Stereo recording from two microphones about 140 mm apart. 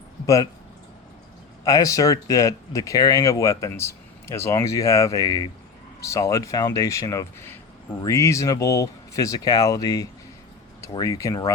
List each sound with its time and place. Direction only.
1.6 s speech: 25° left (ahead or behind)